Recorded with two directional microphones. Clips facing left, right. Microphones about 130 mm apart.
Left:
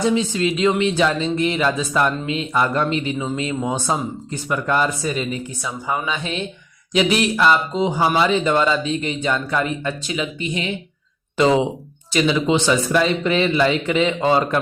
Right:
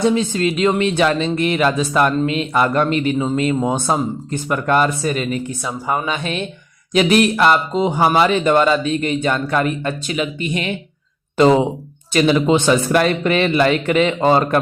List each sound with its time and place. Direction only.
0.1 s a man's voice: 50° right (ahead or behind)
12.1 s a man's voice: 50° right (ahead or behind)